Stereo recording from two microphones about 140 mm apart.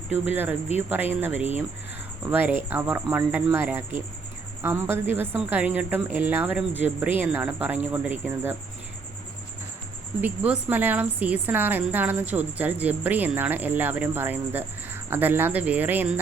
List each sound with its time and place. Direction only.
0.8 s speech: 15° right (ahead or behind)
10.2 s speech: 10° right (ahead or behind)